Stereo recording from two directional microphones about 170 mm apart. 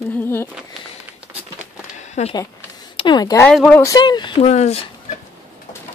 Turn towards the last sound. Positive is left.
turn(degrees=40)  # may be behind; listen again after turning